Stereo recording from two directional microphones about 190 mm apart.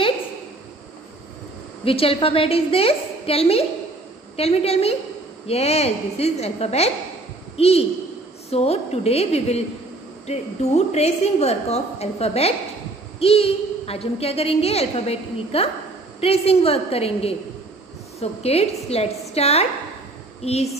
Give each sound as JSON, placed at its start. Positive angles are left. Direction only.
{"t": 1.9, "sound": "a woman's voice", "side_deg": 30}